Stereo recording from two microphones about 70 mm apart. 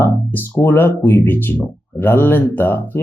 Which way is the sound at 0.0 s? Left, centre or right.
Left.